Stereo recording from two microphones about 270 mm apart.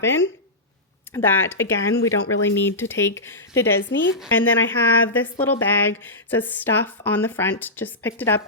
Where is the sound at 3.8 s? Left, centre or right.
Left.